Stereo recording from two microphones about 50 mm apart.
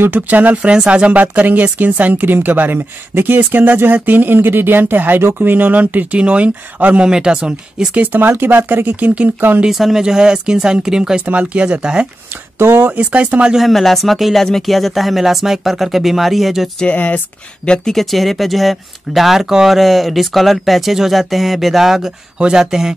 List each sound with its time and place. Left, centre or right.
0.1 s speech: right
0.7 s speech: right
6.1 s speech: right
7.0 s speech: centre
8.1 s speech: right
9.0 s speech: right
9.7 s speech: centre
11.2 s speech: right
12.7 s speech: right
13.6 s speech: centre
16.8 s speech: left
17.6 s speech: centre